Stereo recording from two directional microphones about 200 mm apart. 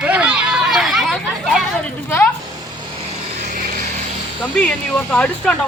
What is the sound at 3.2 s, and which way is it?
Vehicle, 40° right (ahead or behind).